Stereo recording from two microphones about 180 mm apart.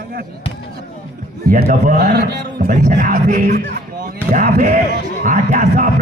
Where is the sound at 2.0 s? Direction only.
60° right (ahead or behind).